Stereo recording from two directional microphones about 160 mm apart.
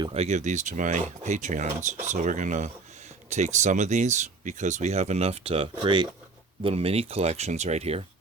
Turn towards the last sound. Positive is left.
turn(degrees=-40)  # may be behind; listen again after turning